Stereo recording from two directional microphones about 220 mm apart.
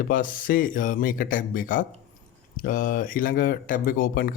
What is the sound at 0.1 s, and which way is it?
Speech, 40° left (ahead or behind).